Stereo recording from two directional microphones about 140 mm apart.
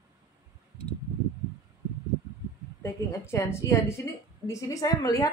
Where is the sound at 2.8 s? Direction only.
20° left (ahead or behind).